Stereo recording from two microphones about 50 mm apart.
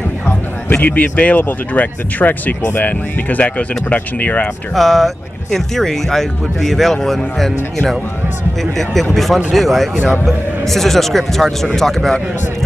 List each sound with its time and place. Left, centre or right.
0.7 s speech: left
4.7 s speech: centre